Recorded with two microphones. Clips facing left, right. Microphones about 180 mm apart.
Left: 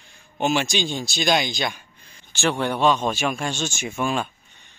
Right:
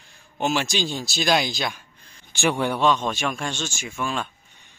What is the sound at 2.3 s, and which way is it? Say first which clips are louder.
Speech: even; 15° right (ahead or behind).